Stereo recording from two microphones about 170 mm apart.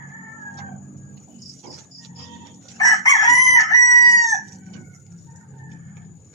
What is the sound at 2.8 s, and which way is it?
Chicken, 20° left (ahead or behind).